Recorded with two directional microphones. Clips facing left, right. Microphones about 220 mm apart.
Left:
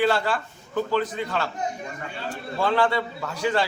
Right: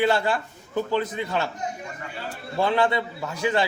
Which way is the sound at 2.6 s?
20° right (ahead or behind).